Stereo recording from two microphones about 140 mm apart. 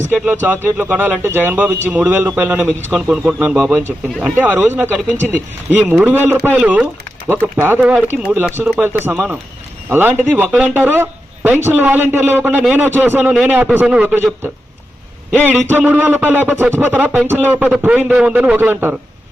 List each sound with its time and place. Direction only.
0.1 s speech: 15° right (ahead or behind)
15.3 s speech: 10° right (ahead or behind)